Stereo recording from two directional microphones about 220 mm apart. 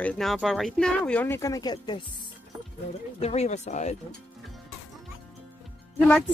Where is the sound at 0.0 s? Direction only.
5° left (ahead or behind); by 2.0 s 20° left (ahead or behind).